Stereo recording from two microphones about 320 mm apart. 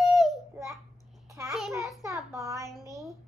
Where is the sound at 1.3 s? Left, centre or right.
Centre.